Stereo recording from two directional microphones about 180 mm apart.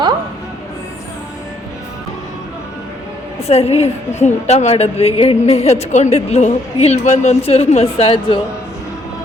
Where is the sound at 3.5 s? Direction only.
35° left (ahead or behind).